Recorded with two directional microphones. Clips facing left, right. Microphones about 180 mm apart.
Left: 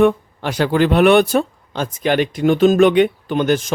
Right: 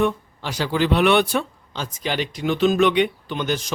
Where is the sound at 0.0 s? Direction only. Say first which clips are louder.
Left 7 dB; 55° left (ahead or behind).